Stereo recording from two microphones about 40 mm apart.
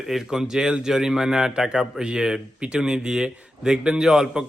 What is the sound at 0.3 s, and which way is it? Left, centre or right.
A man's voice, centre.